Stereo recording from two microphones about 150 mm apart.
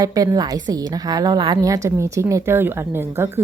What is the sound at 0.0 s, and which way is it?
A woman's voice, 25° right (ahead or behind).